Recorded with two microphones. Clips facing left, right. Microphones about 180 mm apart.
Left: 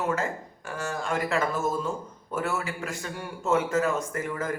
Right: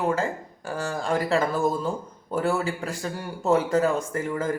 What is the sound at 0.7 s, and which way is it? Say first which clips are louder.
A man's voice: right 4 dB; 35° right (ahead or behind).